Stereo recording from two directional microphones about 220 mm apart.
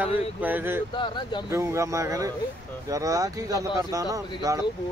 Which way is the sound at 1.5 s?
10° right (ahead or behind).